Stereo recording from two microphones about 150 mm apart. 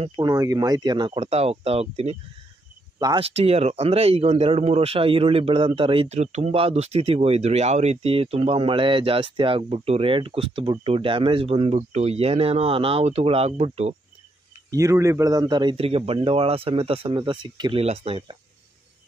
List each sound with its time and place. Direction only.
0.0 s speech: 30° right (ahead or behind)
1.2 s speech: 45° right (ahead or behind)
3.2 s speech: 40° right (ahead or behind)
14.7 s speech: 20° right (ahead or behind)
15.7 s speech: 40° right (ahead or behind)
17.8 s speech: 40° right (ahead or behind)